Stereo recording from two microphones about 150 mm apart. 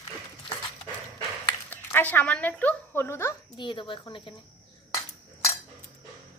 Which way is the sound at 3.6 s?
35° left (ahead or behind).